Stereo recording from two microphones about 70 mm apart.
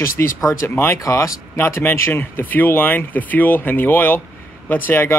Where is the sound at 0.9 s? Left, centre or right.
Left.